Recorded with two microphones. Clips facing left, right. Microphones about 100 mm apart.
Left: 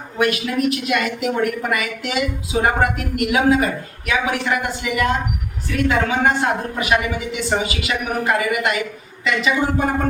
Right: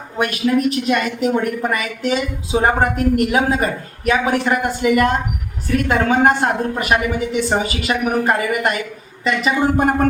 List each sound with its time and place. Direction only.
0.2 s a man's voice: 35° right (ahead or behind)